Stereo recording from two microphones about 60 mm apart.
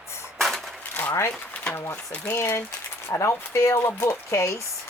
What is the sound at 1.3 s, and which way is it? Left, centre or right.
Pigeon, centre.